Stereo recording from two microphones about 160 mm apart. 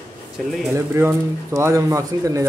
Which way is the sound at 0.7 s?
15° right (ahead or behind).